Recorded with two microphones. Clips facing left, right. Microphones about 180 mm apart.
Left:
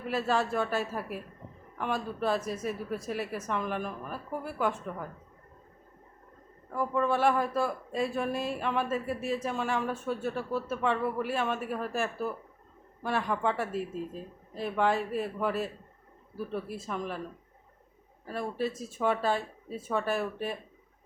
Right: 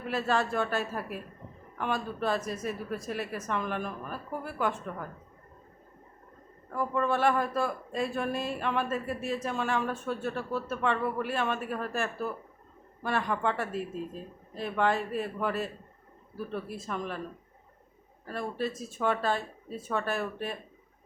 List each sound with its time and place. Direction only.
0.1 s speech: 5° left (ahead or behind)
6.7 s speech: 5° left (ahead or behind)
18.3 s speech: 10° left (ahead or behind)